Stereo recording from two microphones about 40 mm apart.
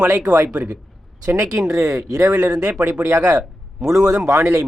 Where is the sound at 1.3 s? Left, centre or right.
Right.